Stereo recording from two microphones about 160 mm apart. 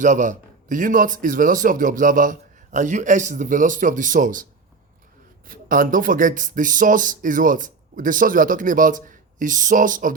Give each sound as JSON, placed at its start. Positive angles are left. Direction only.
{"t": 0.0, "sound": "speech", "side_deg": -50}
{"t": 5.5, "sound": "speech", "side_deg": -60}